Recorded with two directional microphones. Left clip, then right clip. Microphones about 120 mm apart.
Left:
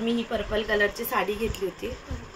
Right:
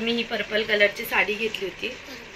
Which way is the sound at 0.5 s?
45° left (ahead or behind).